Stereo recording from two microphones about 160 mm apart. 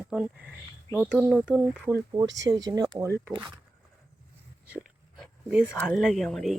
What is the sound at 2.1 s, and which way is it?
Speech, 25° right (ahead or behind).